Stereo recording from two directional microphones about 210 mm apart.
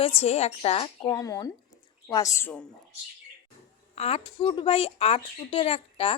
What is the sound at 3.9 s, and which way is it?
Speech, 30° left (ahead or behind).